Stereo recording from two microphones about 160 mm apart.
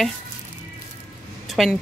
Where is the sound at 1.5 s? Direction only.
Centre (ahead or behind).